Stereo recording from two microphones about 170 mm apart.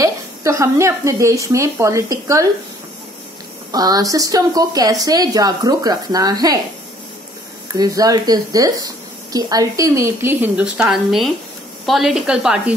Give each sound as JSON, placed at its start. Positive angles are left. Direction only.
{"t": 0.0, "sound": "a woman's voice", "side_deg": -20}
{"t": 3.7, "sound": "a woman's voice", "side_deg": -20}
{"t": 7.7, "sound": "a woman's voice", "side_deg": -20}